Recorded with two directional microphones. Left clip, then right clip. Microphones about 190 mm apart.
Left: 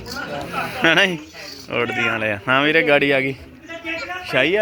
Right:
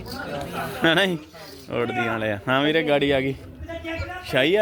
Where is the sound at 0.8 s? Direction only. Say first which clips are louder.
Left 4 dB; 15° right (ahead or behind).